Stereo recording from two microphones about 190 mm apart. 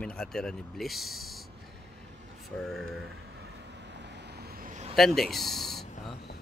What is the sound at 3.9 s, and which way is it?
Vehicle, 65° right (ahead or behind).